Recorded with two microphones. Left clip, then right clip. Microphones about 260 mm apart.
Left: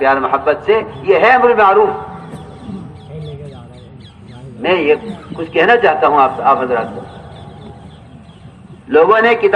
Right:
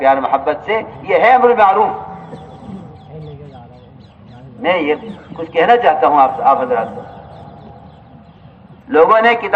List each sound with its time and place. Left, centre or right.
0.0 s a man's voice: left
4.6 s a man's voice: left
8.9 s a man's voice: left